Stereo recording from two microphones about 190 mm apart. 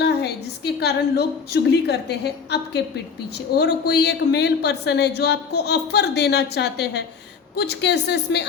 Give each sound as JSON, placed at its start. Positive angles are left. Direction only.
{"t": 0.0, "sound": "a woman's voice", "side_deg": 60}